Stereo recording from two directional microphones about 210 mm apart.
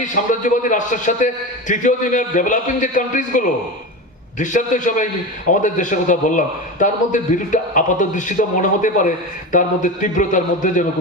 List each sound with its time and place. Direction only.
0.0 s a man's voice: 35° left (ahead or behind)